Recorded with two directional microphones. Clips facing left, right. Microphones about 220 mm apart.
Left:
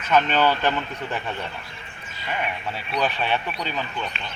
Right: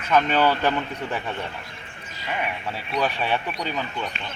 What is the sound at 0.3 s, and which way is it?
Speech, 10° right (ahead or behind).